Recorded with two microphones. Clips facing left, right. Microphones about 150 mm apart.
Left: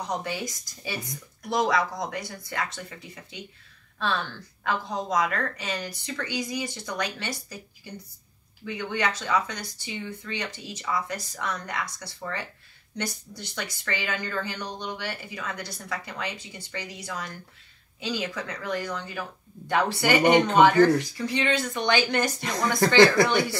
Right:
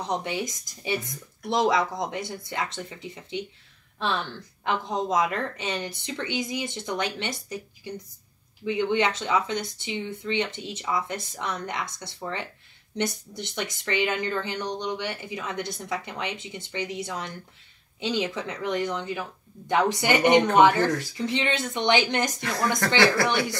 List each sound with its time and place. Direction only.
0.0 s speech: 20° right (ahead or behind)
4.6 s speech: 20° right (ahead or behind)
22.4 s speech: 20° left (ahead or behind)